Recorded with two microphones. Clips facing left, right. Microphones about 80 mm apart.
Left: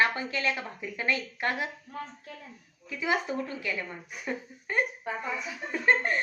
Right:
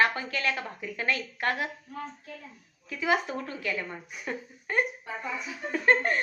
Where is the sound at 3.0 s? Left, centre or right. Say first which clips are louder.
Right 1 dB; centre.